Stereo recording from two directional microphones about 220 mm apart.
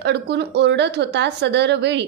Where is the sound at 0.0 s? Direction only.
50° right (ahead or behind).